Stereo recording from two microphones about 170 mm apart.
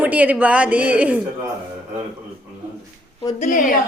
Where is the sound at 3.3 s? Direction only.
50° left (ahead or behind).